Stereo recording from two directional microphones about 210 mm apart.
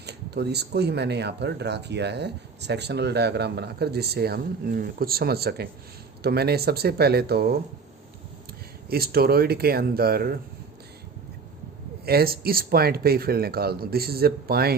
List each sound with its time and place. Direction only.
0.0 s speech: 50° right (ahead or behind)
8.9 s speech: 45° right (ahead or behind)
12.0 s speech: 45° right (ahead or behind)